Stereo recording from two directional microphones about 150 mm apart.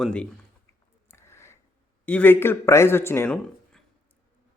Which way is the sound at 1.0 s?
15° left (ahead or behind).